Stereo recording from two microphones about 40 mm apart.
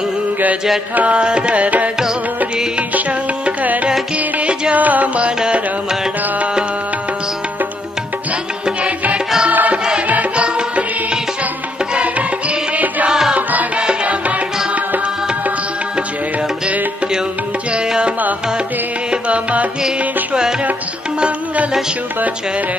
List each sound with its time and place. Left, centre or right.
0.9 s tabla: right
1.2 s tabla: right
2.9 s music: right
5.4 s music: centre
9.5 s music: right
10.3 s music: right
11.9 s music: right
17.8 s music: right